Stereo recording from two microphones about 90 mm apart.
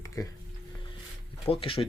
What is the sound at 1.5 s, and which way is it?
Speech, 90° left.